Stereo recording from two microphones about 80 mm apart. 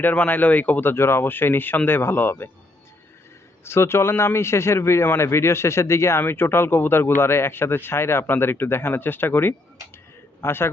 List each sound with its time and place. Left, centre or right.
0.0 s speech: left
3.6 s a man's voice: left